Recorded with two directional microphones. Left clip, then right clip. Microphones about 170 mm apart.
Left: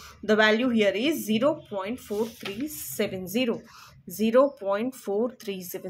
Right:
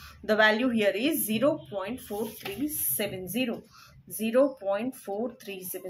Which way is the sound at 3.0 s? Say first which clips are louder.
Left 4 dB; 45° left (ahead or behind).